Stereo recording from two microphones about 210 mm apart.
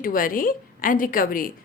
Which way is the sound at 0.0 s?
40° left (ahead or behind).